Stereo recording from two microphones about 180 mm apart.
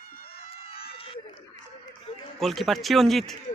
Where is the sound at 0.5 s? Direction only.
30° left (ahead or behind).